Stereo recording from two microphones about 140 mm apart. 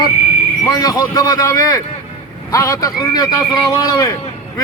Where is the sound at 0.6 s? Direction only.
25° left (ahead or behind).